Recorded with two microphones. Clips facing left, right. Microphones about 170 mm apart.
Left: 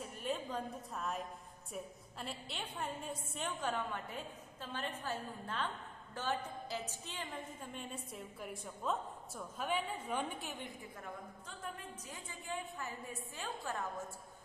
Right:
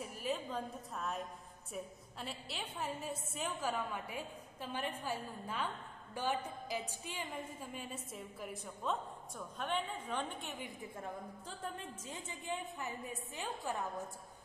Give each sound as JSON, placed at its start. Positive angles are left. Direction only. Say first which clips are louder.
{"t": 0.0, "sound": "a woman's voice", "louder": "right 1 dB", "side_deg": -5}
{"t": 10.8, "sound": "a woman's voice", "louder": "right 3 dB", "side_deg": -30}